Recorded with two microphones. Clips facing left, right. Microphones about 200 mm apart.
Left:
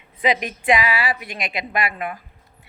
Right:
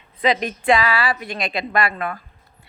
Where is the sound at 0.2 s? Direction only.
15° left (ahead or behind).